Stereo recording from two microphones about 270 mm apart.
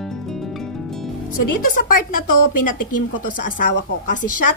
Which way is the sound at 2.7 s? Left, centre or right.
Left.